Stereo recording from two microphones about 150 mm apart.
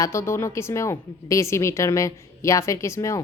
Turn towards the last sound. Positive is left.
turn(degrees=20)  # may be behind; listen again after turning